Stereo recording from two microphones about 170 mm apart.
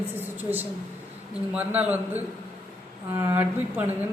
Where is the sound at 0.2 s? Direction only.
10° right (ahead or behind).